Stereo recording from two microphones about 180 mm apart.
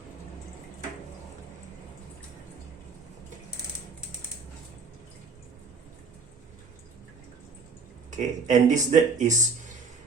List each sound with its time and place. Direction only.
8.1 s speech: 45° right (ahead or behind)